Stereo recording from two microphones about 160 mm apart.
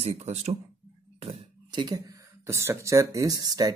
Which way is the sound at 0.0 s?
40° right (ahead or behind).